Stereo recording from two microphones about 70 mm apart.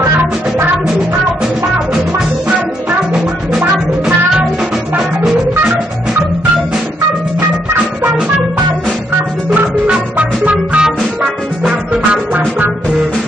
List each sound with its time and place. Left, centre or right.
0.0 s music: right
9.5 s music: centre
11.9 s music: centre